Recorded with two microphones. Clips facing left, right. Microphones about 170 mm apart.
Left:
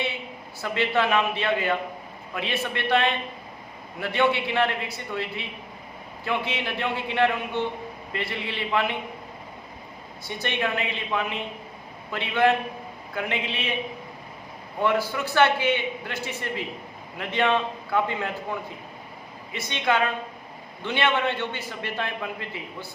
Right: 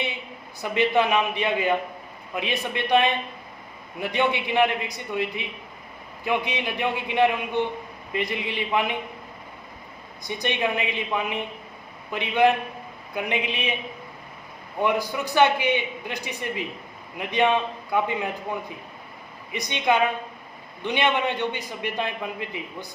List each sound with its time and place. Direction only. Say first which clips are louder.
0.6 s a man's voice: right 3 dB; 15° right (ahead or behind)
10.2 s a man's voice: right 2 dB; 15° right (ahead or behind)
14.8 s a man's voice: even; 15° right (ahead or behind)
19.5 s a man's voice: right 2 dB; 15° right (ahead or behind)